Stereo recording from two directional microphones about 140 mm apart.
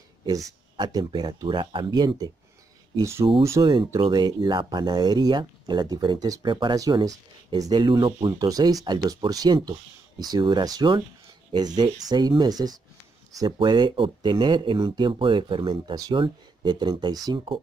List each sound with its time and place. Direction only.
0.7 s speech: 30° right (ahead or behind)
3.6 s speech: 35° right (ahead or behind)